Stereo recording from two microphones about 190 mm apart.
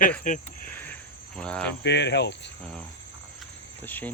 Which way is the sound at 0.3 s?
45° left (ahead or behind).